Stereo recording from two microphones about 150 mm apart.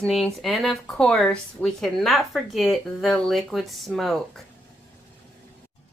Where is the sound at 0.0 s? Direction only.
Centre (ahead or behind).